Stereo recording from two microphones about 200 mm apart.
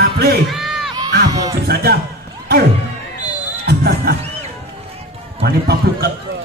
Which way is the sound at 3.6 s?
55° right (ahead or behind).